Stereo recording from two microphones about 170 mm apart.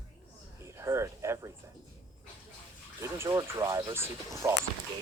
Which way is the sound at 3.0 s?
15° right (ahead or behind).